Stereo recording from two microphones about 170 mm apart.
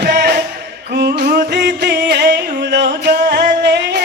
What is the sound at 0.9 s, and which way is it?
Music, 70° right (ahead or behind).